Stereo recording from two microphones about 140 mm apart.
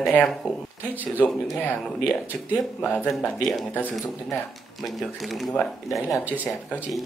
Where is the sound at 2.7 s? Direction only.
5° left (ahead or behind).